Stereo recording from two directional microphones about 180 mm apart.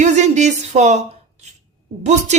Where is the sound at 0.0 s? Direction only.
40° right (ahead or behind).